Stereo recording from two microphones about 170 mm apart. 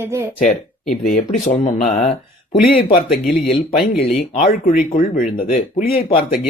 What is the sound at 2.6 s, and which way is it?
Speech, 60° left (ahead or behind).